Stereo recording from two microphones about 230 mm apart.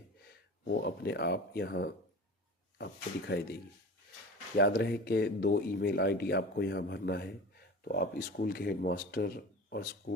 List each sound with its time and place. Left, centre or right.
0.7 s speech: left
4.5 s speech: left